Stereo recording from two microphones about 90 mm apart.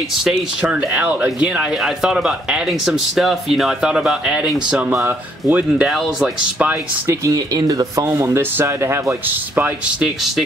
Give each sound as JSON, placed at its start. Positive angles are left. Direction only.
{"t": 0.2, "sound": "speech", "side_deg": -10}
{"t": 5.9, "sound": "speech", "side_deg": -5}
{"t": 6.6, "sound": "speech", "side_deg": -20}
{"t": 7.2, "sound": "speech", "side_deg": -45}
{"t": 10.0, "sound": "speech", "side_deg": -5}